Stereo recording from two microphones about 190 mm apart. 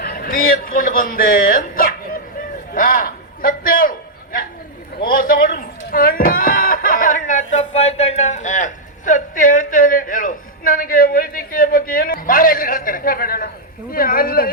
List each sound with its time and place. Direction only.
0.0 s speech: 50° left (ahead or behind)
2.7 s a sound: 50° left (ahead or behind)
13.9 s speech: 50° left (ahead or behind)